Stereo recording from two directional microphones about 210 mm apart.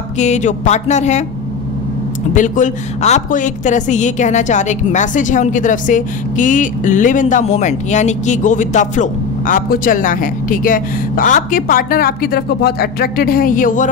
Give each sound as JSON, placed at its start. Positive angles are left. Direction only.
{"t": 0.2, "sound": "a woman's voice", "side_deg": 35}
{"t": 2.3, "sound": "a woman's voice", "side_deg": 35}